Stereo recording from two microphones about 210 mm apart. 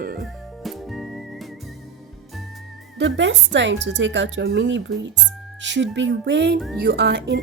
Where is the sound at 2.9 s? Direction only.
60° right (ahead or behind).